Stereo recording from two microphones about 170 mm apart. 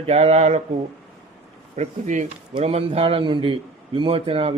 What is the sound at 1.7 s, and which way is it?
A man's voice, 45° right (ahead or behind).